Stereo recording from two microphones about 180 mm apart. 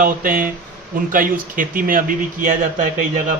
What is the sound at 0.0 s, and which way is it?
Speech, 50° right (ahead or behind).